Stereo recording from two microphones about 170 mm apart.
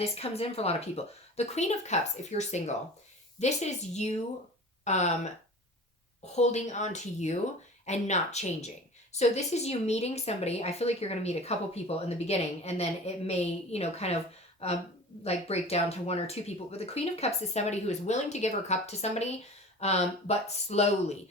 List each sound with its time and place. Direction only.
0.0 s speech: 35° left (ahead or behind)